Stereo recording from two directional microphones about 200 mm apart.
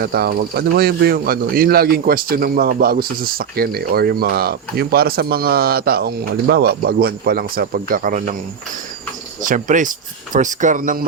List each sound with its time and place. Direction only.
0.0 s speech: 50° right (ahead or behind)
9.4 s speech: 40° right (ahead or behind)